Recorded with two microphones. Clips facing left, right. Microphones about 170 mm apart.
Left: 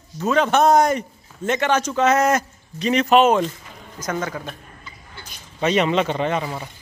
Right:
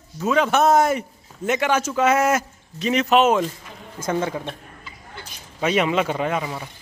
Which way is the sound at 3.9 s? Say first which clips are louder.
Right 2 dB; 25° right (ahead or behind).